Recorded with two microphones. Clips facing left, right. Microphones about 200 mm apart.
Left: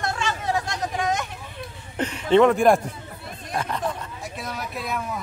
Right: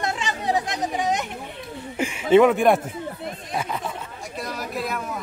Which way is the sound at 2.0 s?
10° right (ahead or behind).